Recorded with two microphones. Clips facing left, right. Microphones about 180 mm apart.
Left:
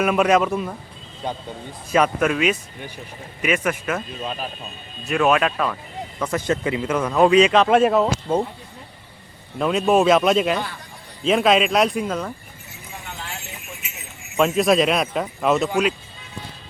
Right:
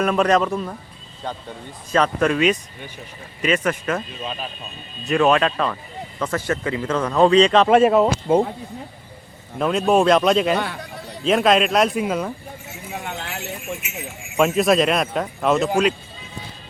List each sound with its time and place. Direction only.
0.0 s speech: 5° left (ahead or behind)
1.9 s a man's voice: 10° left (ahead or behind)
9.6 s speech: centre (ahead or behind)
10.6 s a man's voice: 65° right (ahead or behind)
11.2 s speech: centre (ahead or behind)
12.9 s a sound: 65° right (ahead or behind)
14.3 s speech: centre (ahead or behind)